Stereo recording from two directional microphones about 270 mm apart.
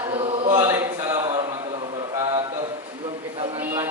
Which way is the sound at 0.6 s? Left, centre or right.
Centre.